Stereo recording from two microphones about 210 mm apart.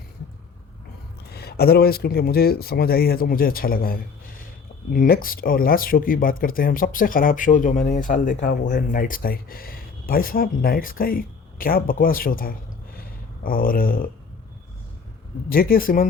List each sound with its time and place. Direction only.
1.3 s speech: 50° left (ahead or behind)
13.0 s a sound: 40° left (ahead or behind)
15.4 s speech: 45° left (ahead or behind)